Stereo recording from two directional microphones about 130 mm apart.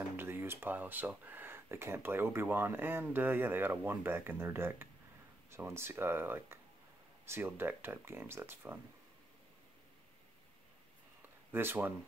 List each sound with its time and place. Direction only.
0.2 s speech: 15° right (ahead or behind)
11.5 s speech: 15° right (ahead or behind)